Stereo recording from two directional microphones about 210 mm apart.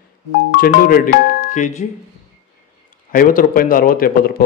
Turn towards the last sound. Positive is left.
turn(degrees=45)  # may be behind; listen again after turning